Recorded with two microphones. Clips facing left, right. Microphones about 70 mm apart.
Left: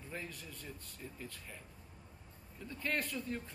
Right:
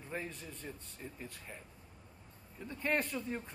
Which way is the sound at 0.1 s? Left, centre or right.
Right.